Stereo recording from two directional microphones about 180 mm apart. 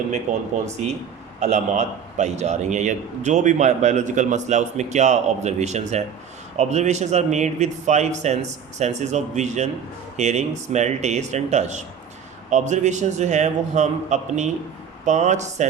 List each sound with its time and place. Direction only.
0.6 s a man's voice: 40° right (ahead or behind)